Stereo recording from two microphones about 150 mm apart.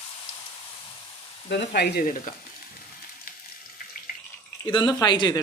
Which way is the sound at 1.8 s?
80° left.